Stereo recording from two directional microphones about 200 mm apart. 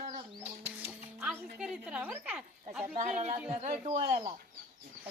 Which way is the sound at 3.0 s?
35° right (ahead or behind).